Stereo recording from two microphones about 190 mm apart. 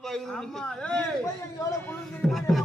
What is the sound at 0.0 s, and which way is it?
Speech, centre (ahead or behind).